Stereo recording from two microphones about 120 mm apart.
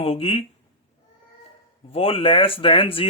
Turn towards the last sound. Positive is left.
turn(degrees=50)  # may be behind; listen again after turning